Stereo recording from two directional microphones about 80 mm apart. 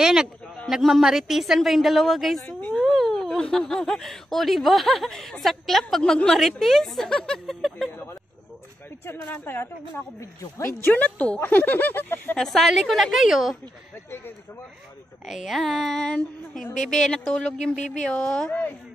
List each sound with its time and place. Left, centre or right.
0.0 s a man's voice: centre
2.8 s a sound: centre
3.4 s speech: centre
9.0 s speech: left
10.9 s speech: centre
12.4 s speech: centre
15.2 s speech: centre